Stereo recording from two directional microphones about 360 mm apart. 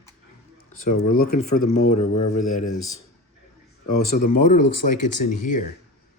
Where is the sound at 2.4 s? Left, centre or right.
Left.